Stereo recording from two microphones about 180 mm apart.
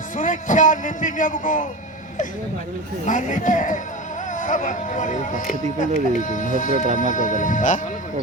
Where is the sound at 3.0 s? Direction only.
45° left (ahead or behind).